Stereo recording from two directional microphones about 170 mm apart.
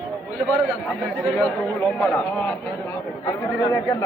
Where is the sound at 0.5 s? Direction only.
5° left (ahead or behind).